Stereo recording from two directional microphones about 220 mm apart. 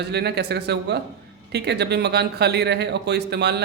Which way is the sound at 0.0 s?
50° right (ahead or behind).